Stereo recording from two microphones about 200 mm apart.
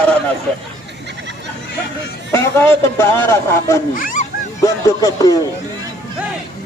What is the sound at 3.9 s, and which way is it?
Speech, 45° left (ahead or behind).